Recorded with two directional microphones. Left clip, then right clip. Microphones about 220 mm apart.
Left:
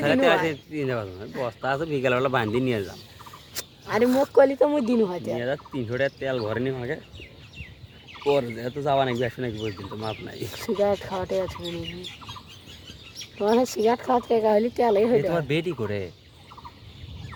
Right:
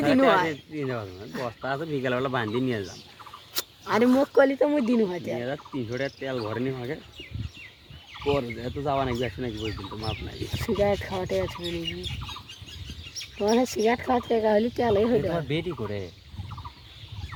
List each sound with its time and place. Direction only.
0.0 s speech: 50° left (ahead or behind)
3.5 s fowl: 20° right (ahead or behind)
4.1 s speech: 10° right (ahead or behind)
4.4 s speech: 5° left (ahead or behind)
5.4 s speech: 50° left (ahead or behind)
8.2 s speech: 50° left (ahead or behind)
10.5 s speech: centre (ahead or behind)
13.1 s speech: centre (ahead or behind)
15.3 s speech: 30° left (ahead or behind)